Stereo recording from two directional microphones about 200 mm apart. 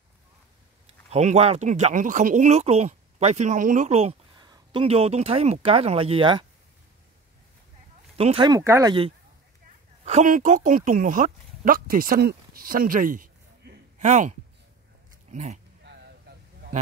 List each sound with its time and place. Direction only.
0.8 s a man's voice: 35° right (ahead or behind)
8.2 s speech: 25° right (ahead or behind)
10.0 s speech: 40° right (ahead or behind)
15.3 s speech: 35° right (ahead or behind)